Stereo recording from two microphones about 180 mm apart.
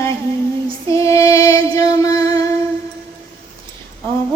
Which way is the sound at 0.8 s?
15° left (ahead or behind).